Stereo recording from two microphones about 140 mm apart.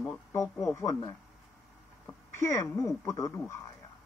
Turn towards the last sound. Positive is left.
turn(degrees=20)  # may be behind; listen again after turning